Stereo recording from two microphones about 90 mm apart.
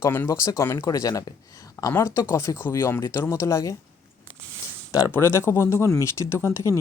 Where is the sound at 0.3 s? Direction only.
35° left (ahead or behind).